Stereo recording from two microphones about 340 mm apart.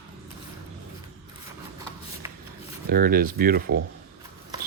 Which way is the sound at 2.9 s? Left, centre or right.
Right.